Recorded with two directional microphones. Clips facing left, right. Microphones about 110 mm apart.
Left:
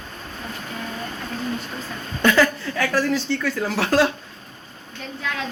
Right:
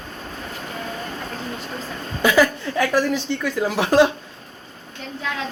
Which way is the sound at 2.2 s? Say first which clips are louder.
Right 1 dB; 10° right (ahead or behind).